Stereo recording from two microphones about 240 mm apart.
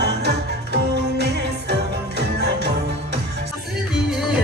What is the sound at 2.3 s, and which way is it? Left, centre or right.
Music, right.